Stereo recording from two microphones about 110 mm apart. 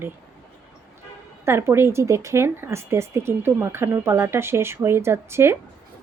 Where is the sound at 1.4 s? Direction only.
25° right (ahead or behind).